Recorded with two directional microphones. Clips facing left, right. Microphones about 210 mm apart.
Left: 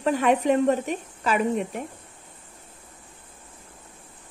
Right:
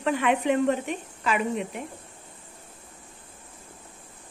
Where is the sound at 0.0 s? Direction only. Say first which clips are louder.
Left 3 dB; 40° left (ahead or behind).